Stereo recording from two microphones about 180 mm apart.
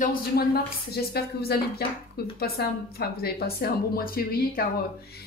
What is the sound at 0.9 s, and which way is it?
A woman's voice, 60° left (ahead or behind).